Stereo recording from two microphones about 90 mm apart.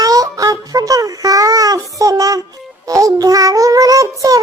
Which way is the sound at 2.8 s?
40° right (ahead or behind).